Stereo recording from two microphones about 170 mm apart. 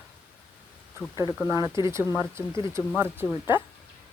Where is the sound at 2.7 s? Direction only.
15° right (ahead or behind).